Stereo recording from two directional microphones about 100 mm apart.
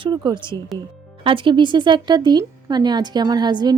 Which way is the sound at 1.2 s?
60° right (ahead or behind).